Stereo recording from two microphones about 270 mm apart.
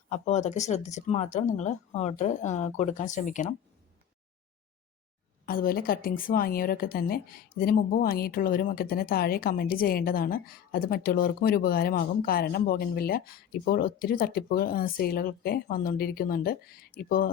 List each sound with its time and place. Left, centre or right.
0.1 s speech: left
5.5 s a woman's voice: left